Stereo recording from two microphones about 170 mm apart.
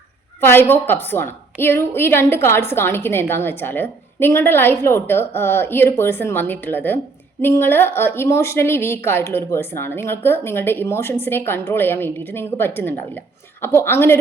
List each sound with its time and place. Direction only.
0.7 s a woman's voice: 10° left (ahead or behind)